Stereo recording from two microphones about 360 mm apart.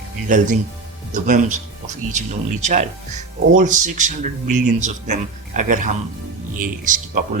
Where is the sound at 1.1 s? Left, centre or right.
Right.